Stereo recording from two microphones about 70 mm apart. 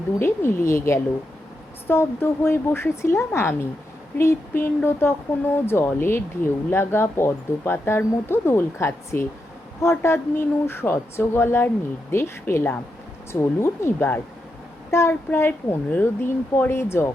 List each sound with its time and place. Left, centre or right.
0.2 s speech: left